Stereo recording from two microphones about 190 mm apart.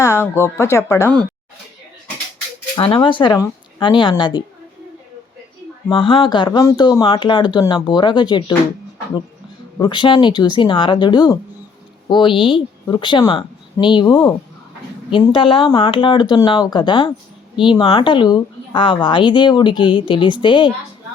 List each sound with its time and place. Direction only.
0.0 s speech: 15° left (ahead or behind)
2.7 s a woman's voice: 25° left (ahead or behind)
5.9 s a woman's voice: 25° left (ahead or behind)
9.7 s a woman's voice: 25° left (ahead or behind)